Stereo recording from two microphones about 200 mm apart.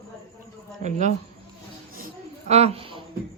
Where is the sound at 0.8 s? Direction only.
35° right (ahead or behind).